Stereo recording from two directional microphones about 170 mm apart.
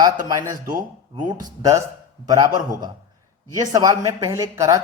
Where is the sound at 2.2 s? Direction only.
20° right (ahead or behind).